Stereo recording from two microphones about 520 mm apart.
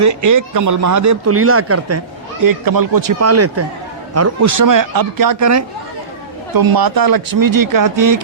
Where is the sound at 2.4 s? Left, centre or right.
Right.